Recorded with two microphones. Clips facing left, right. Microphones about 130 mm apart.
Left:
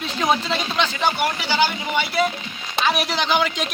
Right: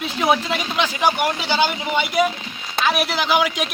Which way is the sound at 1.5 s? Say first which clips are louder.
Right 1 dB; 20° right (ahead or behind).